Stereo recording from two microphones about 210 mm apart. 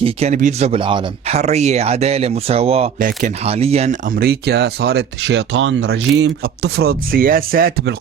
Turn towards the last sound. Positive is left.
turn(degrees=-50)  # may be behind; listen again after turning